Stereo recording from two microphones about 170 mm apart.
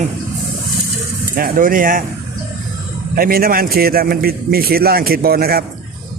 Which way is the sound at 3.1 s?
60° right (ahead or behind).